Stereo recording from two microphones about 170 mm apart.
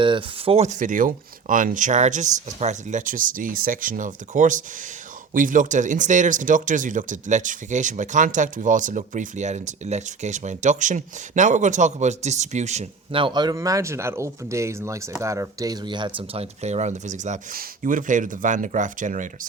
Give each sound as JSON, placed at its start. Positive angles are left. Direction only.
{"t": 0.0, "sound": "speech", "side_deg": -30}